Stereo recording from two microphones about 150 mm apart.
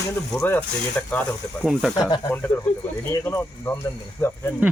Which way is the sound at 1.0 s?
10° left (ahead or behind).